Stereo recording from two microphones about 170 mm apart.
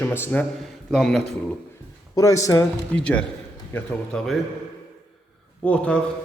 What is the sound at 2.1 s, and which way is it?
A man's voice, 20° left (ahead or behind).